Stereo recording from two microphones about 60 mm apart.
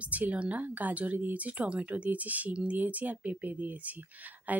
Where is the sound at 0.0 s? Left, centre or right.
Right.